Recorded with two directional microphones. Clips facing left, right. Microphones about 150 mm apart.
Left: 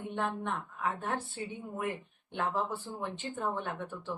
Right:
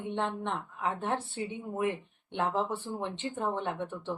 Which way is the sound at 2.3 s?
25° right (ahead or behind).